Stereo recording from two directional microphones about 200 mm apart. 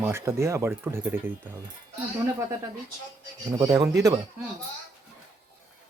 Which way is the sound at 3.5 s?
15° right (ahead or behind).